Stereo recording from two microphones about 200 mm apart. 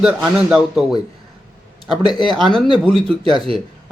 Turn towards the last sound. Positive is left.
turn(degrees=-25)  # may be behind; listen again after turning